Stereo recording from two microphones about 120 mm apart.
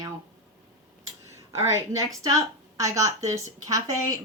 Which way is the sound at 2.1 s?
30° right (ahead or behind).